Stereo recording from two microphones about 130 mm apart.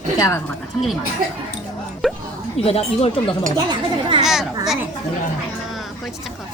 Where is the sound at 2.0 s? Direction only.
Centre (ahead or behind).